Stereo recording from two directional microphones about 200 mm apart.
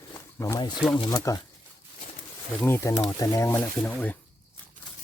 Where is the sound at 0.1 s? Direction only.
15° left (ahead or behind).